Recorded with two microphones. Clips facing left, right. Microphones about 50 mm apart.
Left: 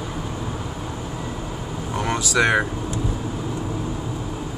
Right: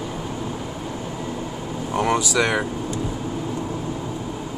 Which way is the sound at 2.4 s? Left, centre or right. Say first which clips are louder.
Left 6 dB; centre.